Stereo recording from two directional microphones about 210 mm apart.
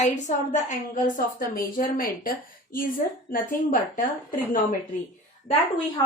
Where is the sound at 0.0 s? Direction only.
35° left (ahead or behind).